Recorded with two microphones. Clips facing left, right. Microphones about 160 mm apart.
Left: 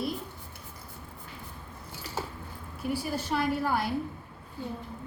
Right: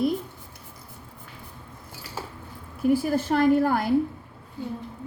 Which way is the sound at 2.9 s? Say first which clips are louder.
Right 8 dB; 50° right (ahead or behind).